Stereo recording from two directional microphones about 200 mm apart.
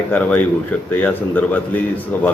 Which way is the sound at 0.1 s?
5° left (ahead or behind).